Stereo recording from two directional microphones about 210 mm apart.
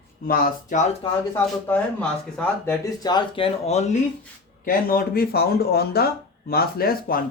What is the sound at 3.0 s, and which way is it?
Speech, 20° left (ahead or behind).